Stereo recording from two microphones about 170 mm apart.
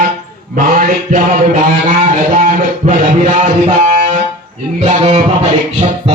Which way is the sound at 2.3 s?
45° right (ahead or behind).